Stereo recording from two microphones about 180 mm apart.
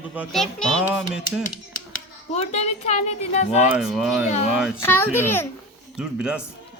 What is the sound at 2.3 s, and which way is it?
A child's voice, 35° left (ahead or behind).